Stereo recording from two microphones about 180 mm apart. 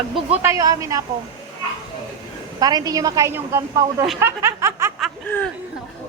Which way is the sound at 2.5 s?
20° right (ahead or behind).